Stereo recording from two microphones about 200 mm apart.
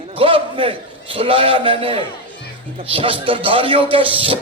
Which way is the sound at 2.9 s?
25° right (ahead or behind).